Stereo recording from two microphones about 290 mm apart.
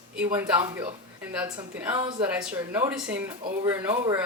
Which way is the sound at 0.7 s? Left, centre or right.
Centre.